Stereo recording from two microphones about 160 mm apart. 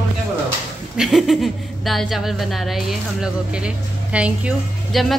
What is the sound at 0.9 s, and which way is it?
A woman's voice, centre (ahead or behind).